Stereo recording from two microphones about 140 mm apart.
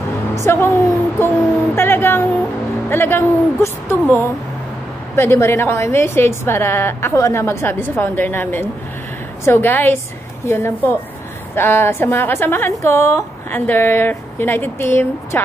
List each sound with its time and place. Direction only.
0.4 s a woman's voice: 20° left (ahead or behind)
5.1 s a woman's voice: 20° left (ahead or behind)